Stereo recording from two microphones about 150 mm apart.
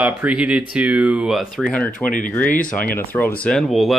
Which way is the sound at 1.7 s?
10° left (ahead or behind).